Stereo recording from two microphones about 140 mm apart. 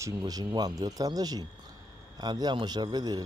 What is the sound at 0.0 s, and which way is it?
A man's voice, 30° right (ahead or behind).